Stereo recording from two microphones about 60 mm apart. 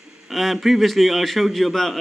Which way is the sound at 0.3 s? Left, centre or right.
Centre.